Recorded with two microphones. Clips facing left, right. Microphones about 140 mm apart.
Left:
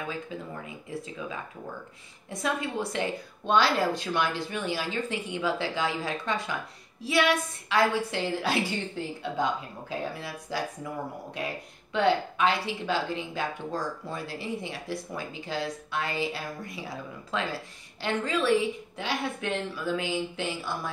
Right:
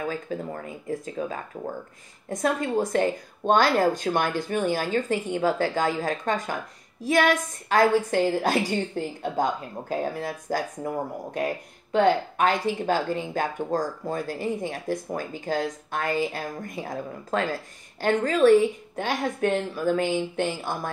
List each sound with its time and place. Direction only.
0.3 s speech: 45° right (ahead or behind)